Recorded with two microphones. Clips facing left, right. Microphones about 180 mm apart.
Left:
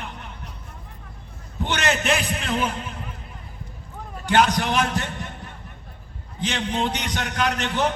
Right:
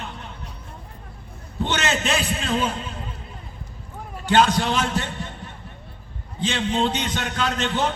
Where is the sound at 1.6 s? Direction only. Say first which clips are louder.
Even; 15° left (ahead or behind).